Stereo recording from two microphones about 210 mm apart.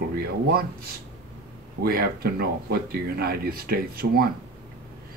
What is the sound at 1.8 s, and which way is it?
Speech, 45° right (ahead or behind).